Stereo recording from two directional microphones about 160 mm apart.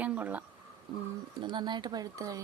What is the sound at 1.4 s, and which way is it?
Speech, 30° right (ahead or behind).